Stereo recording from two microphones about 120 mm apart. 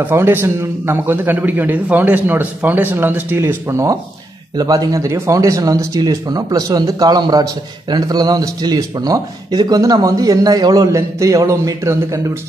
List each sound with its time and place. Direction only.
0.0 s a man's voice: 20° right (ahead or behind)